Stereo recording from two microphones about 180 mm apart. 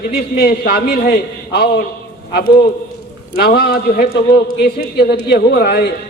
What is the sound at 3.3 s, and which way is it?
A man's voice, 60° left (ahead or behind).